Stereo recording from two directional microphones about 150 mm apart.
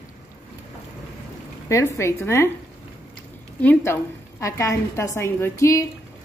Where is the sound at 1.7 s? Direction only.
20° left (ahead or behind).